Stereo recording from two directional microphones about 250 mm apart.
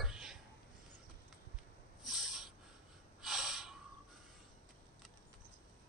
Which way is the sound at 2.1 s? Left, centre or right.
Centre.